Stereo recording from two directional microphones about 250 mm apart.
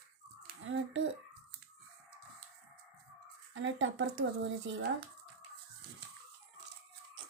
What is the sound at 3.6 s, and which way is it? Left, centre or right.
A child's voice, right.